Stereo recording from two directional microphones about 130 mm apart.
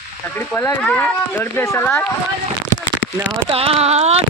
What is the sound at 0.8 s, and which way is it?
Speech, 10° left (ahead or behind).